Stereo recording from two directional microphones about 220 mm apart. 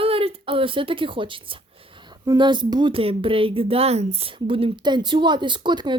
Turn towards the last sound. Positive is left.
turn(degrees=-20)  # may be behind; listen again after turning